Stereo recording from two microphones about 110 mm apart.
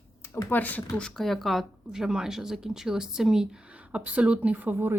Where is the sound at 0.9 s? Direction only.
5° left (ahead or behind); by 4.9 s 20° right (ahead or behind).